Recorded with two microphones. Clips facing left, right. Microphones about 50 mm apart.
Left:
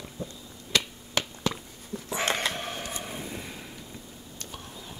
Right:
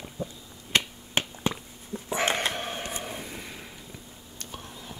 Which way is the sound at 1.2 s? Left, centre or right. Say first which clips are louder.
Right 1 dB; right.